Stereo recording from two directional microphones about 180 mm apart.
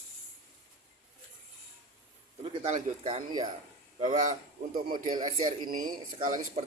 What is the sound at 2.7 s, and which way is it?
Speech, 40° right (ahead or behind).